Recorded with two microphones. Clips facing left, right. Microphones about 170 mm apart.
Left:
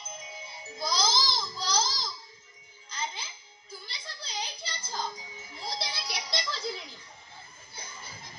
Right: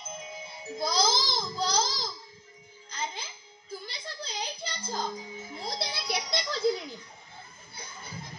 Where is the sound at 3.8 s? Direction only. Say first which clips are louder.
Right 5 dB; 55° right (ahead or behind).